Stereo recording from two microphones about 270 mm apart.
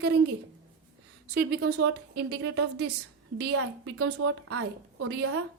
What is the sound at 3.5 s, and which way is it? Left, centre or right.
A woman's voice, right.